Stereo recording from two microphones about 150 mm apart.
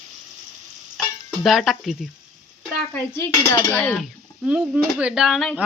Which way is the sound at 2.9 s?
15° left (ahead or behind).